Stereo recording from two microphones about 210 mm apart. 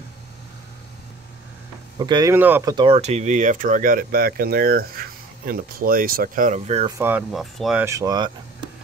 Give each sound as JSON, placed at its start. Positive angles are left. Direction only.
{"t": 2.0, "sound": "speech", "side_deg": -20}
{"t": 2.7, "sound": "speech", "side_deg": -25}
{"t": 7.0, "sound": "speech", "side_deg": -10}
{"t": 7.8, "sound": "speech", "side_deg": -15}